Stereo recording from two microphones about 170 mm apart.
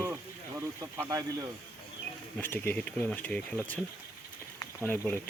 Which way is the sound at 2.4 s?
10° left (ahead or behind).